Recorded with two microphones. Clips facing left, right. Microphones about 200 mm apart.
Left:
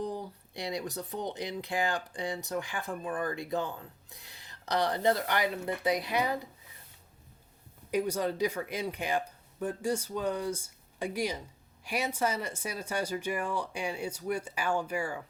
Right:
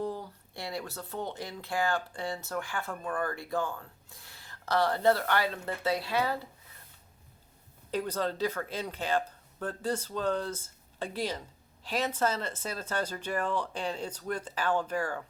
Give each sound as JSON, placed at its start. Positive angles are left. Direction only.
{"t": 0.0, "sound": "speech", "side_deg": 15}
{"t": 7.9, "sound": "speech", "side_deg": 10}